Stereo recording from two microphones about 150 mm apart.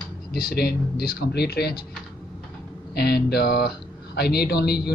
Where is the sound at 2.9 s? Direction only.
90° left.